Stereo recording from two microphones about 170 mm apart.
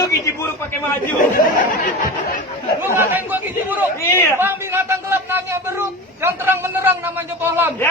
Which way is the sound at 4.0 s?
15° left (ahead or behind).